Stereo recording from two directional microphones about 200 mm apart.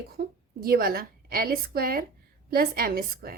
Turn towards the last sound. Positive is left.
turn(degrees=-50)  # may be behind; listen again after turning